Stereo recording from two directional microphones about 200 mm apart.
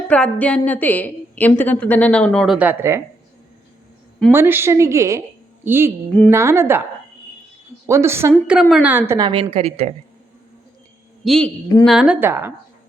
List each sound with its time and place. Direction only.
0.1 s a woman's voice: 5° left (ahead or behind)
2.6 s a woman's voice: 10° right (ahead or behind)
4.3 s a woman's voice: 10° right (ahead or behind)
6.1 s a woman's voice: 5° left (ahead or behind)
6.3 s a woman's voice: 15° right (ahead or behind)
7.9 s a woman's voice: 15° right (ahead or behind); by 9.9 s 30° right (ahead or behind)
11.2 s a woman's voice: centre (ahead or behind)